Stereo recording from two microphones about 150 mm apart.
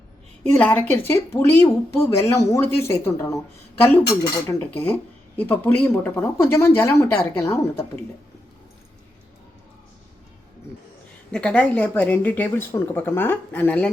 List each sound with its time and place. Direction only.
0.5 s speech: 10° left (ahead or behind)
11.3 s speech: 5° left (ahead or behind)